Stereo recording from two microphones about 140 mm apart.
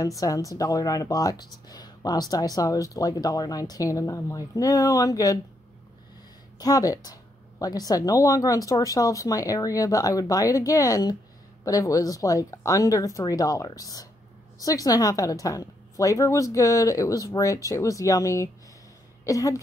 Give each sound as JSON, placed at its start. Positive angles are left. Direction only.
{"t": 0.0, "sound": "speech", "side_deg": 25}
{"t": 6.6, "sound": "speech", "side_deg": 25}